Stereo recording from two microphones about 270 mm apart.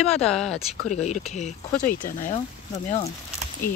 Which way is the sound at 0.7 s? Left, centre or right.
Left.